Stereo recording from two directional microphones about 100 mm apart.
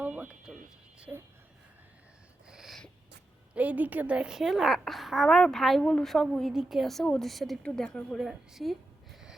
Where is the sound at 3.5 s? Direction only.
15° right (ahead or behind).